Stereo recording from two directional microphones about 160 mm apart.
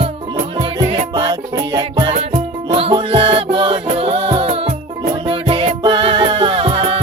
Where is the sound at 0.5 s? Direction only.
25° right (ahead or behind).